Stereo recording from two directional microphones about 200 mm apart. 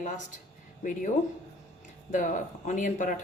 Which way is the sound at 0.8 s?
40° left (ahead or behind).